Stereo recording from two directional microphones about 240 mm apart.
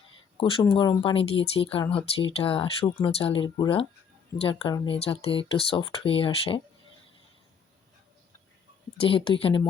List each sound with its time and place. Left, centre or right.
0.3 s speech: left
9.0 s speech: left